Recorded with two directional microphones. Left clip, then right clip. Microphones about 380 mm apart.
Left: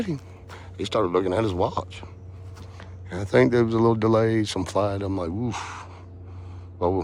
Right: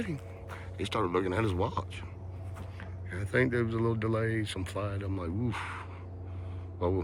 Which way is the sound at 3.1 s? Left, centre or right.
Centre.